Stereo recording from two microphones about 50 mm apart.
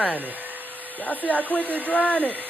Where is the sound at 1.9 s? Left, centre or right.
Left.